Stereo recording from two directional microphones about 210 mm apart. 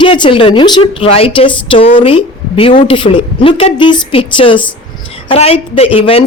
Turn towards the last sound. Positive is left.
turn(degrees=25)  # may be behind; listen again after turning